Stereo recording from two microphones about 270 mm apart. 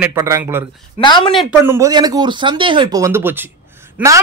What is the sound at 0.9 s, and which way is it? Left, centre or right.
Speech, centre.